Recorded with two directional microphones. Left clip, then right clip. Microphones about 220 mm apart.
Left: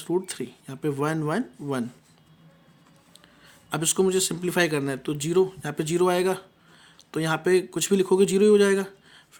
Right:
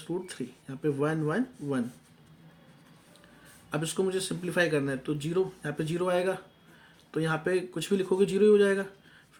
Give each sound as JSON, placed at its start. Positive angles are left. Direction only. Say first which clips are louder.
{"t": 0.0, "sound": "speech", "louder": "left 8 dB", "side_deg": 45}
{"t": 3.7, "sound": "speech", "louder": "left 6 dB", "side_deg": 45}